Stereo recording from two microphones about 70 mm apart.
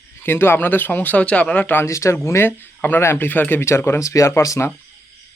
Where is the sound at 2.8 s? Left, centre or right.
Left.